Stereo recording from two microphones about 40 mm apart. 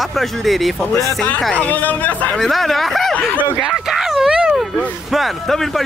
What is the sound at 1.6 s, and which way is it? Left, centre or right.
Speech, left.